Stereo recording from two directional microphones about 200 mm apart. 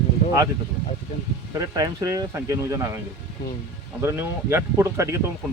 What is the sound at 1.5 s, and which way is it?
Speech, 20° right (ahead or behind).